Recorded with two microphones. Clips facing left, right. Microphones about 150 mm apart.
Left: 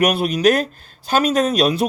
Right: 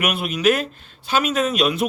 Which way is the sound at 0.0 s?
35° left (ahead or behind).